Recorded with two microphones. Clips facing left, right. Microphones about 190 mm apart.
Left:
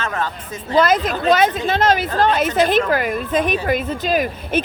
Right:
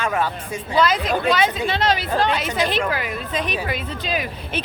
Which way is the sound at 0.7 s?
50° left (ahead or behind).